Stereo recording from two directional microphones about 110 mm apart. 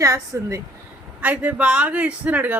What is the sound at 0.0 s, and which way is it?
Speech, 30° right (ahead or behind).